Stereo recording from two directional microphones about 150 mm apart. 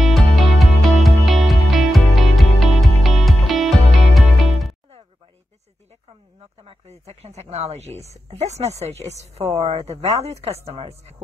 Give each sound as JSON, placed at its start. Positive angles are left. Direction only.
{"t": 0.0, "sound": "music", "side_deg": 0}
{"t": 6.6, "sound": "a sound", "side_deg": -40}
{"t": 8.3, "sound": "a woman's voice", "side_deg": -45}